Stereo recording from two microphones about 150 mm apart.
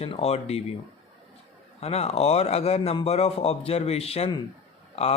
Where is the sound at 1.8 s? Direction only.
45° left (ahead or behind).